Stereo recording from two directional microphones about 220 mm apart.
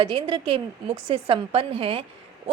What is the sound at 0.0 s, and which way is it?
A woman's voice, 20° right (ahead or behind).